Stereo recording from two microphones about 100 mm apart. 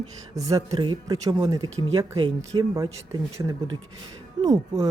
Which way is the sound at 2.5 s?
40° right (ahead or behind).